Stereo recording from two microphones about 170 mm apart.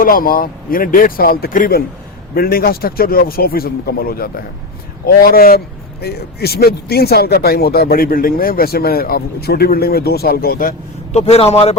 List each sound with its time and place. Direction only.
0.0 s speech: 55° left (ahead or behind)
11.1 s a man's voice: 40° left (ahead or behind)